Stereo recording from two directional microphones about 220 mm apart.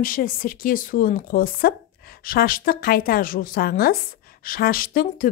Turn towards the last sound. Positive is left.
turn(degrees=40)  # may be behind; listen again after turning